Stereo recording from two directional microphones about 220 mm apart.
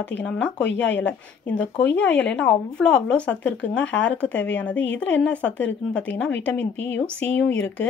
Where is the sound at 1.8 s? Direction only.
55° left (ahead or behind).